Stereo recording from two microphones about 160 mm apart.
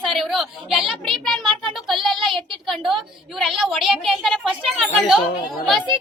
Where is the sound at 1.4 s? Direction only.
30° right (ahead or behind).